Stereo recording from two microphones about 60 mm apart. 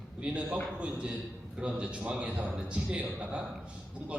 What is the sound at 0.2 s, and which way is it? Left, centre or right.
A man's voice, centre.